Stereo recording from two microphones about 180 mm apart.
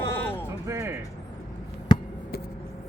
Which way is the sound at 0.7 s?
15° right (ahead or behind).